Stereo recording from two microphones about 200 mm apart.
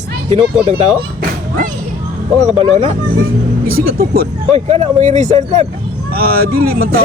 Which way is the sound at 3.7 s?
50° right (ahead or behind).